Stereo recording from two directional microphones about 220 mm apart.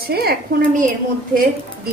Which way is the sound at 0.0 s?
45° right (ahead or behind).